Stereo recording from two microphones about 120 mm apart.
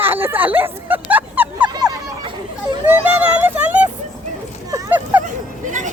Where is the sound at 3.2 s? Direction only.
15° right (ahead or behind).